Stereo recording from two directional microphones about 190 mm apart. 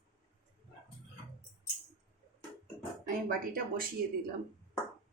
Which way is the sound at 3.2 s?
50° right (ahead or behind).